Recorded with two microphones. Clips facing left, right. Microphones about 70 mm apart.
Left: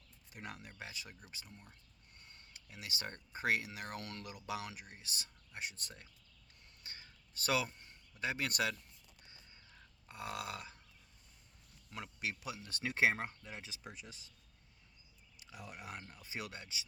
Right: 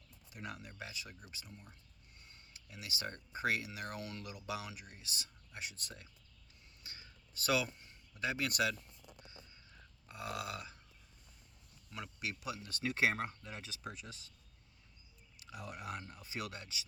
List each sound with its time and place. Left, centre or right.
0.3 s speech: left
2.5 s speech: left
6.8 s a sound: left
8.2 s speech: left
10.1 s speech: left
12.2 s speech: left
15.5 s speech: left